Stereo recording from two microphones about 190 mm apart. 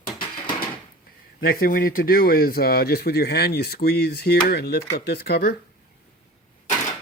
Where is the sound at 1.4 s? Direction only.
50° left (ahead or behind).